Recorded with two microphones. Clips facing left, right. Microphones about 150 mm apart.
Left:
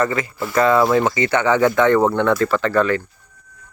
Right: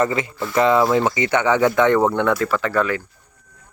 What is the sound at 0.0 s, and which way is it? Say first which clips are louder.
Speech: even; 20° right (ahead or behind).